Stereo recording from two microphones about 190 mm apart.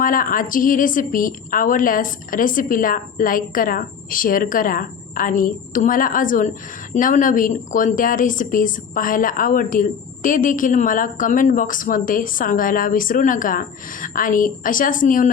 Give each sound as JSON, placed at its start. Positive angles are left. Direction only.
{"t": 0.0, "sound": "a woman's voice", "side_deg": 45}